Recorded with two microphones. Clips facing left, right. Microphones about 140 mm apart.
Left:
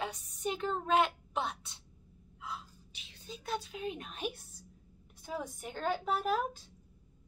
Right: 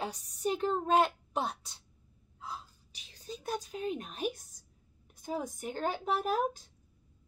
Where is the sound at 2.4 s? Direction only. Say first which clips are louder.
Even; 35° right (ahead or behind).